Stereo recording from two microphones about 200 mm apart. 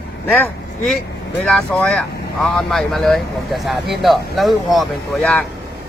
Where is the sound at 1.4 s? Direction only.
5° left (ahead or behind).